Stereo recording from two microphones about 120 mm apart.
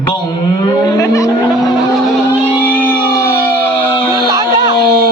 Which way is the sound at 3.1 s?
30° left (ahead or behind).